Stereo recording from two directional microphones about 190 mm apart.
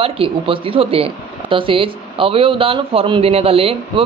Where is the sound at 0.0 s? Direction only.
30° right (ahead or behind).